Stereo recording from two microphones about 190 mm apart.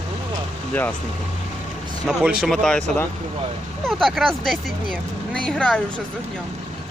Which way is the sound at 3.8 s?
Centre (ahead or behind).